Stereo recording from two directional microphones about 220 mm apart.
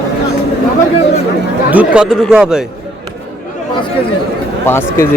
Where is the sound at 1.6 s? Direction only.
5° right (ahead or behind).